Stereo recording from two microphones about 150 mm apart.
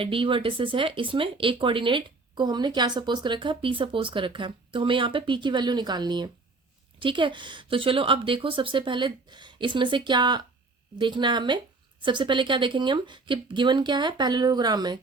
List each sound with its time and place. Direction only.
0.0 s speech: 35° right (ahead or behind)